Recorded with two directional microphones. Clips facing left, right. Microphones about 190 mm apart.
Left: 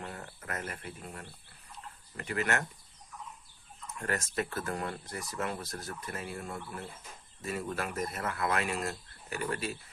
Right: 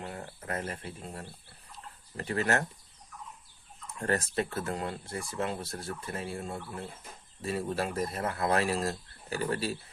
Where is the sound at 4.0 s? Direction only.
35° right (ahead or behind).